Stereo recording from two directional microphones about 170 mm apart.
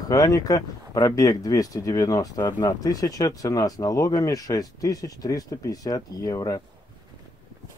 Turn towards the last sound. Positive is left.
turn(degrees=20)  # may be behind; listen again after turning